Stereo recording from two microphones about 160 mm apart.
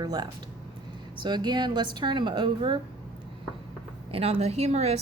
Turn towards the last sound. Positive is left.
turn(degrees=-40)  # may be behind; listen again after turning